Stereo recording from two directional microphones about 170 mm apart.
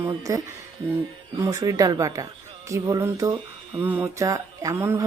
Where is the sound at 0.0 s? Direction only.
20° right (ahead or behind).